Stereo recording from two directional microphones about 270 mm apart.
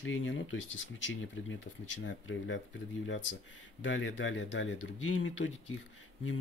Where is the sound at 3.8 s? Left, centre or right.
Left.